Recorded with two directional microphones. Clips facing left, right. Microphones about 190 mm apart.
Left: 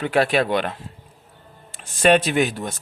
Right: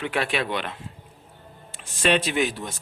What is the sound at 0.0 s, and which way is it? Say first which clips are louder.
Speech: left 7 dB; 40° left (ahead or behind).